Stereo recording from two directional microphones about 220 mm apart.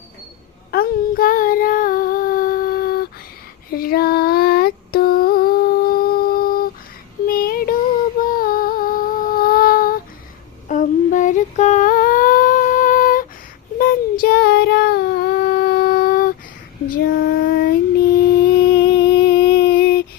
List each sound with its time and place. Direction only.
0.7 s child singing: 40° left (ahead or behind)
3.7 s female singing: 45° left (ahead or behind)
7.3 s child singing: 40° left (ahead or behind)
8.2 s a sound: 40° left (ahead or behind)
13.7 s child singing: 40° left (ahead or behind)
16.9 s female singing: 45° left (ahead or behind)
18.7 s humming: 50° left (ahead or behind)